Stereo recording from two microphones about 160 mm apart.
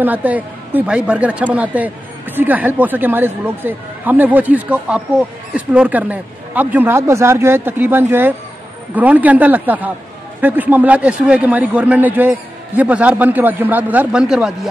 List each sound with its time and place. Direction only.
0.0 s a man's voice: 10° right (ahead or behind)